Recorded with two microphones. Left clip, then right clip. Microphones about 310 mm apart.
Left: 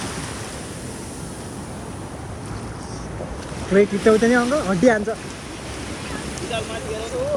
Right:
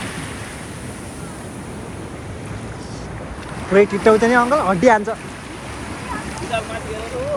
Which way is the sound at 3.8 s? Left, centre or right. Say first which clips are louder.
Right 2 dB; right.